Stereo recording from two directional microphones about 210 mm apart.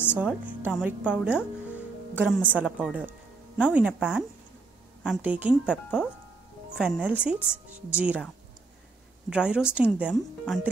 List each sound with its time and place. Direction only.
0.2 s a woman's voice: 5° right (ahead or behind)
9.3 s a woman's voice: 5° right (ahead or behind)